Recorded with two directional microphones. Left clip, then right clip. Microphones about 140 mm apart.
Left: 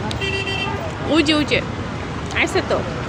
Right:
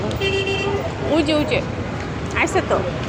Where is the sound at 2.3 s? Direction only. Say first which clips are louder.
Even; 15° left (ahead or behind).